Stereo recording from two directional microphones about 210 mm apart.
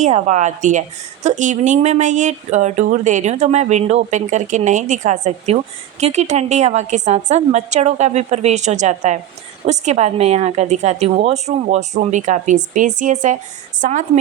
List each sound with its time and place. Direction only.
0.0 s a woman's voice: 35° right (ahead or behind)